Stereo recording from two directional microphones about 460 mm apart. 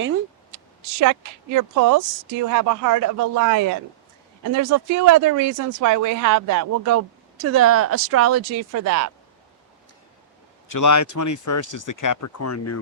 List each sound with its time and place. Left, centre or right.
0.9 s speech: right
10.7 s speech: left